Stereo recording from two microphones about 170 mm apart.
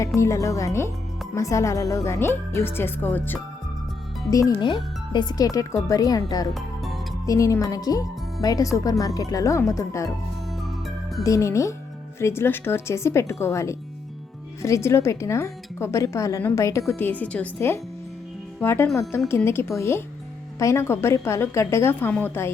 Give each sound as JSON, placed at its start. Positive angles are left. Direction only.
{"t": 0.2, "sound": "speech", "side_deg": 15}
{"t": 6.5, "sound": "music", "side_deg": 0}
{"t": 7.3, "sound": "speech", "side_deg": 20}
{"t": 11.2, "sound": "speech", "side_deg": 20}